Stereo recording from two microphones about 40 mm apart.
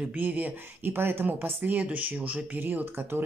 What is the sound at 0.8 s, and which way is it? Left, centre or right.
Speech, right.